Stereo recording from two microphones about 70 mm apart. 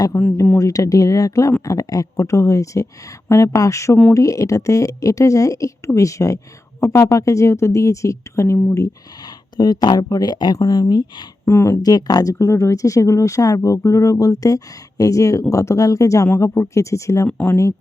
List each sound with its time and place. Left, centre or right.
0.1 s speech: left
0.6 s speech: left
9.6 s speech: left
10.6 s speech: left
11.4 s speech: left
11.8 s speech: left
12.3 s speech: left
17.2 s speech: left
17.5 s speech: left